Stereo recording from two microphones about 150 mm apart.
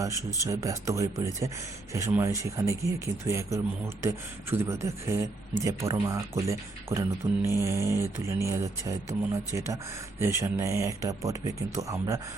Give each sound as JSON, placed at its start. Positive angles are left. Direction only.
{"t": 0.0, "sound": "speech", "side_deg": -20}